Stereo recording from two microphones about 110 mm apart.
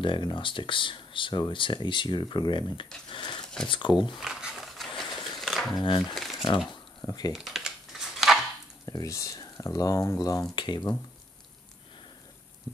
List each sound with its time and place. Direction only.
0.0 s speech: 45° left (ahead or behind)
3.1 s a sound: 50° left (ahead or behind)
3.6 s speech: 50° left (ahead or behind)
4.1 s a sound: 5° right (ahead or behind)
5.4 s crumpling: centre (ahead or behind)
5.8 s speech: 45° left (ahead or behind)
6.1 s a sound: centre (ahead or behind)
7.1 s speech: 35° left (ahead or behind)
7.3 s typing: centre (ahead or behind)
8.8 s speech: 30° left (ahead or behind)